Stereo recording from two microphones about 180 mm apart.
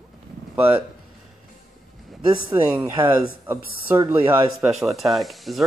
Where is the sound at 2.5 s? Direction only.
20° right (ahead or behind).